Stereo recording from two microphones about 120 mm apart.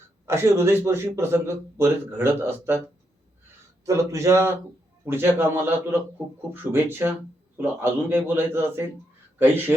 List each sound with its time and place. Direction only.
0.3 s a man's voice: 20° right (ahead or behind)